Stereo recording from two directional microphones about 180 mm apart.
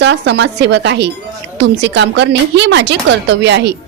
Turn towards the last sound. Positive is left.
turn(degrees=-70)  # may be behind; listen again after turning